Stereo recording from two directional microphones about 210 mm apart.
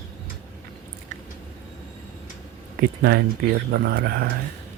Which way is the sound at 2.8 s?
50° right (ahead or behind).